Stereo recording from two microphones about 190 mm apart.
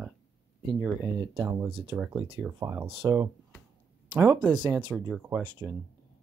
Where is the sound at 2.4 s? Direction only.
15° right (ahead or behind).